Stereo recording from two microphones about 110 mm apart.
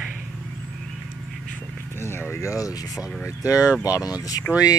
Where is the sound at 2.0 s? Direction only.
20° left (ahead or behind).